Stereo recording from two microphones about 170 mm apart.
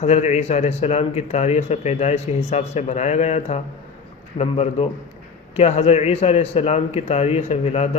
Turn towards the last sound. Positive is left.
turn(degrees=40)  # may be behind; listen again after turning